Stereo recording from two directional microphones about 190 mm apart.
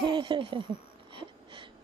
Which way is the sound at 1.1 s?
25° right (ahead or behind).